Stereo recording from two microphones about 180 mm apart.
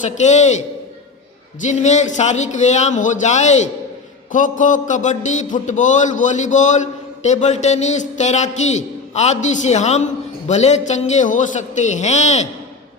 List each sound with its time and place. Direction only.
0.0 s a man's voice: 40° left (ahead or behind)
1.6 s a man's voice: 40° left (ahead or behind)